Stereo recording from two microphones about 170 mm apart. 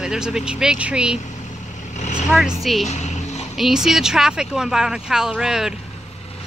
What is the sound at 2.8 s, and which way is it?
Music, 40° left (ahead or behind).